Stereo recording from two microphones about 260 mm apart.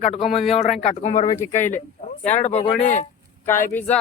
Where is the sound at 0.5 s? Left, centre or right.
Left.